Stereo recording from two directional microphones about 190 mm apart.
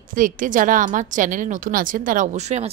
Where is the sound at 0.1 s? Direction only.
45° right (ahead or behind).